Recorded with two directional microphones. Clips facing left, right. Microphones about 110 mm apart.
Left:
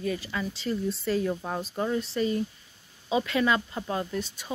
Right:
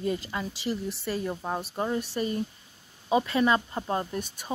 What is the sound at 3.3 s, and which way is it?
Speech, 30° right (ahead or behind).